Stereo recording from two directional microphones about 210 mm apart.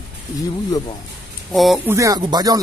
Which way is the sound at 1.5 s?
Centre (ahead or behind).